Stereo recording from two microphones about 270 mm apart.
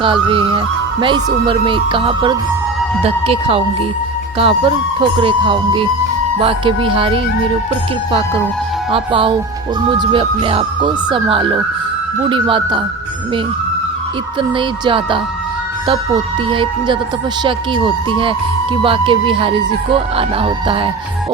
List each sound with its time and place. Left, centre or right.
0.0 s speech: centre
8.9 s speech: centre
14.5 s speech: centre
16.5 s speech: centre